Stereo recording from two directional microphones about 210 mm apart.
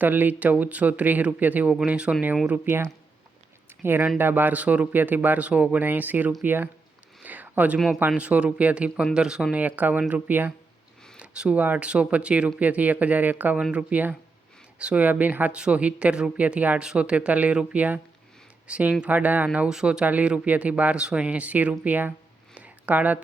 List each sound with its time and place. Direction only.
0.0 s speech: 10° right (ahead or behind)
3.8 s speech: 10° right (ahead or behind)
22.5 s a sound: 5° right (ahead or behind)